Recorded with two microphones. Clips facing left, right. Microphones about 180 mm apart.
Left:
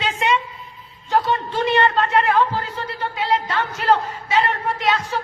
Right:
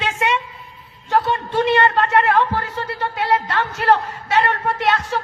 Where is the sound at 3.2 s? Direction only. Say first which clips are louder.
Right 1 dB; 70° right (ahead or behind).